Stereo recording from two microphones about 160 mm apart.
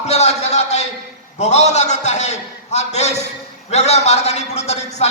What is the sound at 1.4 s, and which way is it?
A man's voice, 45° left (ahead or behind).